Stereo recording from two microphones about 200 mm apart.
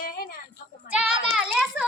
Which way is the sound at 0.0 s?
50° left (ahead or behind).